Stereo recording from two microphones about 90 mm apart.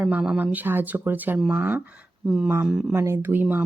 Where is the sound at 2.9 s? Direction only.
30° right (ahead or behind).